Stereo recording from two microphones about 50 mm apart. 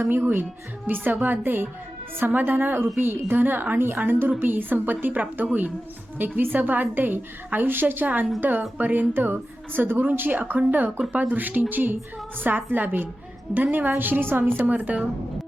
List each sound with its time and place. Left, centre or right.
0.0 s a woman's voice: right